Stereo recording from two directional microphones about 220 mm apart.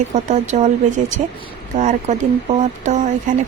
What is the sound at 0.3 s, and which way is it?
Speech, 35° right (ahead or behind).